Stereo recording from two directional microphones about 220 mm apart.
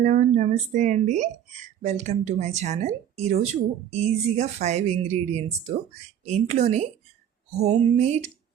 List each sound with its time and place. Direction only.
0.0 s speech: 35° right (ahead or behind)